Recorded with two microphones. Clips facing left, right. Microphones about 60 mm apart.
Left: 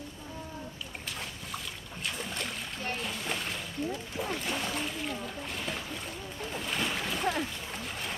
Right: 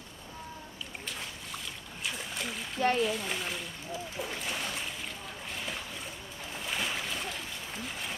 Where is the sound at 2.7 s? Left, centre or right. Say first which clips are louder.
Right 11 dB; right.